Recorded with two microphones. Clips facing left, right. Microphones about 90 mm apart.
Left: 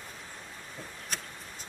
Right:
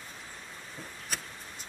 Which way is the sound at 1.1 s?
Centre (ahead or behind).